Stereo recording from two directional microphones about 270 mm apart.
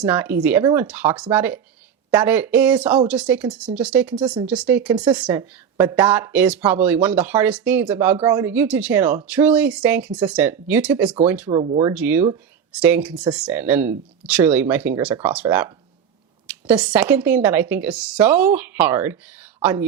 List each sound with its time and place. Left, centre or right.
0.0 s speech: centre
11.6 s speech: centre
11.9 s speech: centre